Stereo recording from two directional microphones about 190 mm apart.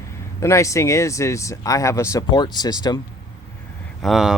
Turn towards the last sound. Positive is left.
turn(degrees=0)  # may be behind; listen again after turning